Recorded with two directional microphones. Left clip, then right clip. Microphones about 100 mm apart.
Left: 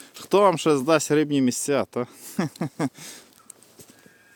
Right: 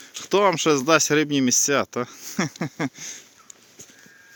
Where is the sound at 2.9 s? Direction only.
55° left (ahead or behind).